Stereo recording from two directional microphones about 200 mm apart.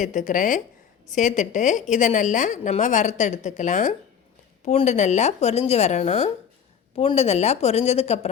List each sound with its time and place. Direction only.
0.0 s a woman's voice: 40° left (ahead or behind)